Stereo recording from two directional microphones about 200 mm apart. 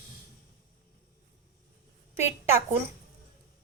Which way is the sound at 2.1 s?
10° right (ahead or behind).